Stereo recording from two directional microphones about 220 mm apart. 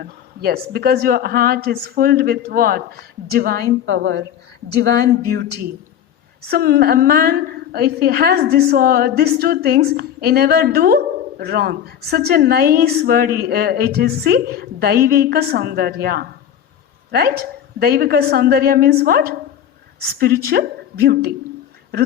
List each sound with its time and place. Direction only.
0.0 s a woman's voice: 45° right (ahead or behind)
5.3 s a woman's voice: 45° right (ahead or behind)